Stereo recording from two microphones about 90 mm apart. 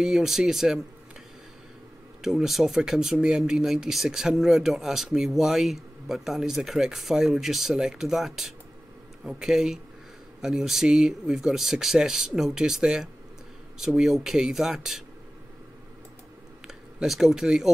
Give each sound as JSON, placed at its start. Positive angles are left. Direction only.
{"t": 0.0, "sound": "speech", "side_deg": -5}
{"t": 2.2, "sound": "speech", "side_deg": -5}
{"t": 16.6, "sound": "speech", "side_deg": -5}